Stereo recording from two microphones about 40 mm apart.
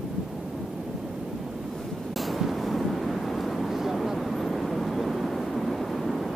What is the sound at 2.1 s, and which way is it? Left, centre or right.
Vehicle, centre.